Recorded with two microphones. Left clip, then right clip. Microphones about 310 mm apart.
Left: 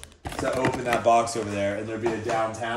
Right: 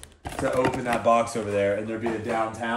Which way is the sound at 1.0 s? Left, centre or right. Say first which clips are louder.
Even; right.